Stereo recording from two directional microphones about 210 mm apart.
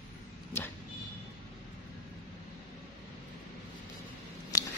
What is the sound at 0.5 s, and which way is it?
Speech, 10° left (ahead or behind).